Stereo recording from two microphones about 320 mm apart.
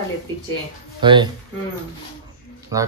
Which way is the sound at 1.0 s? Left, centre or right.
Centre.